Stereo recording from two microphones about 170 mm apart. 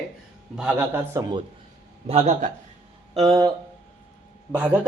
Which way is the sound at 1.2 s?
20° right (ahead or behind).